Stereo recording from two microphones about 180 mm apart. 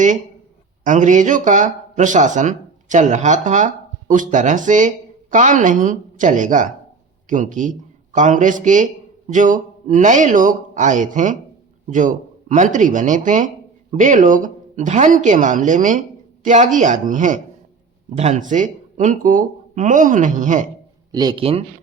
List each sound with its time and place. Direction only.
0.9 s speech: 45° right (ahead or behind)
21.1 s speech: 25° right (ahead or behind)